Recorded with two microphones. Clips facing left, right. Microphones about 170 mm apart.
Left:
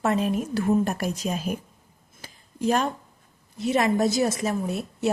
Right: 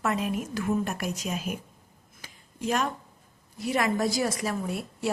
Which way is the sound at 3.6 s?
25° left (ahead or behind).